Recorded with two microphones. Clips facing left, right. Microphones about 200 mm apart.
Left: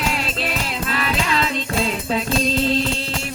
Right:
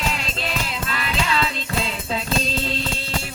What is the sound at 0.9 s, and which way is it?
Music, 40° left (ahead or behind).